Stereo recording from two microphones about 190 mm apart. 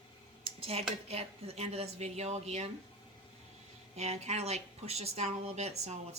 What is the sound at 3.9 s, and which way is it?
Speech, 35° right (ahead or behind).